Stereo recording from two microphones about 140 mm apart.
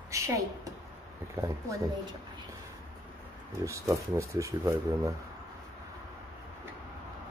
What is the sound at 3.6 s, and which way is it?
Speech, 20° right (ahead or behind).